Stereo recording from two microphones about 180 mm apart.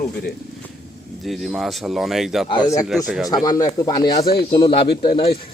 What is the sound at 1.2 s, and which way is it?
Speech, centre (ahead or behind).